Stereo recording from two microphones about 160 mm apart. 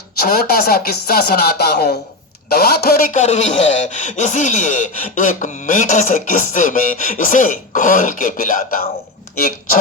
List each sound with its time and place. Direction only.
0.2 s a man's voice: 70° left (ahead or behind)